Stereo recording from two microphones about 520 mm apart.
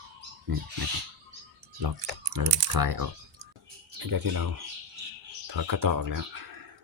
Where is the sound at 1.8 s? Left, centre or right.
Right.